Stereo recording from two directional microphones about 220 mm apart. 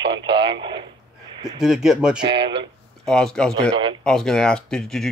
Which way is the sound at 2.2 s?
20° right (ahead or behind).